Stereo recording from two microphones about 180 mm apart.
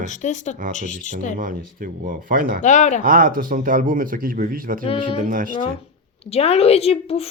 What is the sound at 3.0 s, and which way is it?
Speech, 50° right (ahead or behind).